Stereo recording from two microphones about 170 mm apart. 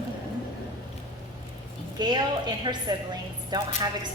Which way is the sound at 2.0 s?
25° right (ahead or behind).